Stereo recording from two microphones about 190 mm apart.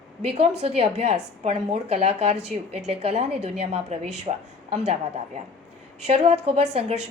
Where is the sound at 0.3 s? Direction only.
35° right (ahead or behind).